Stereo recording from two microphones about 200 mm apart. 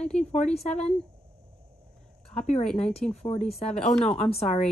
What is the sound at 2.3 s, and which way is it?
Speech, 30° left (ahead or behind).